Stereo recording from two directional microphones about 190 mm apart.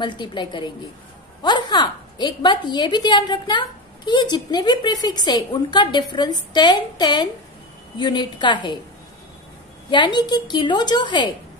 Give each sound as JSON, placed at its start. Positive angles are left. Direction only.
{"t": 0.0, "sound": "a woman's voice", "side_deg": 25}
{"t": 9.8, "sound": "a woman's voice", "side_deg": 25}